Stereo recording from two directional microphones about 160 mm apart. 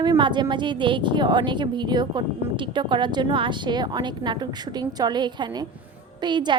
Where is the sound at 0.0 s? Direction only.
30° right (ahead or behind).